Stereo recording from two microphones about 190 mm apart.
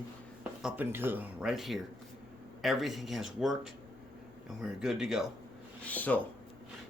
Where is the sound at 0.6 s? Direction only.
5° right (ahead or behind).